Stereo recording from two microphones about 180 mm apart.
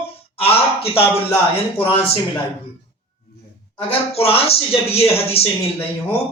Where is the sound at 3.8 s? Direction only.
30° left (ahead or behind).